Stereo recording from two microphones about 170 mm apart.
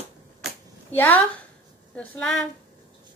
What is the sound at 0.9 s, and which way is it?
A child's voice, 10° left (ahead or behind).